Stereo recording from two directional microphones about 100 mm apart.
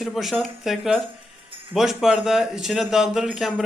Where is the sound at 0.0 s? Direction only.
Centre (ahead or behind).